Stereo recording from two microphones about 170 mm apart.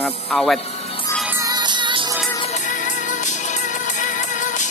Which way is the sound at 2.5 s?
45° left (ahead or behind).